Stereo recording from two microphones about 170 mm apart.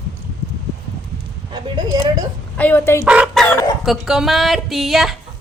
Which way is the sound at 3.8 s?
Centre (ahead or behind).